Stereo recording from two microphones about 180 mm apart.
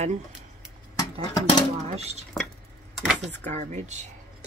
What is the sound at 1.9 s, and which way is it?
Speech, 35° right (ahead or behind).